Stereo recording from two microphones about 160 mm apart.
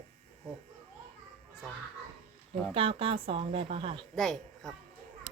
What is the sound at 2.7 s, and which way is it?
Speech, 35° right (ahead or behind).